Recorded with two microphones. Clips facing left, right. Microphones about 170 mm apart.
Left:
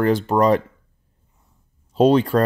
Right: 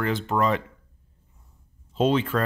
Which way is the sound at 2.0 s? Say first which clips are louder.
Left 7 dB; 40° left (ahead or behind).